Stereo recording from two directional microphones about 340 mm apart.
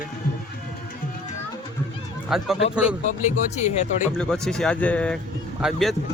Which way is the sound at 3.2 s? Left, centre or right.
Left.